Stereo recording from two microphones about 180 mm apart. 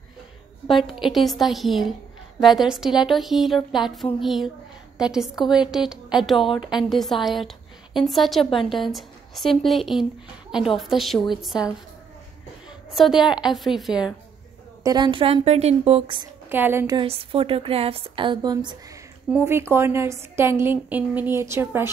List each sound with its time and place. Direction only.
0.7 s a woman's voice: centre (ahead or behind)
6.3 s a woman's voice: 30° left (ahead or behind)
6.6 s speech: 5° right (ahead or behind)
12.9 s speech: centre (ahead or behind)
14.8 s a woman's voice: 20° right (ahead or behind)
16.4 s a woman's voice: 10° right (ahead or behind)
17.1 s speech: 30° right (ahead or behind)
19.3 s a woman's voice: 15° right (ahead or behind)